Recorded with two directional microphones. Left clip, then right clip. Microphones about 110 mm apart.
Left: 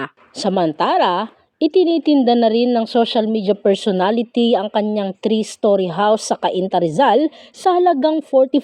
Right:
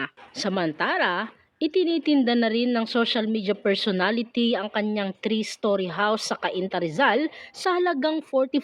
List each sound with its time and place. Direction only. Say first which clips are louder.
0.3 s a woman's voice: left 9 dB; 35° left (ahead or behind)